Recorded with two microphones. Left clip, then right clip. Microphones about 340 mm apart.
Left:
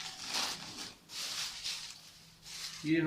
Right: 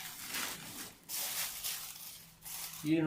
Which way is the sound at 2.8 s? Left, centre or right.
Centre.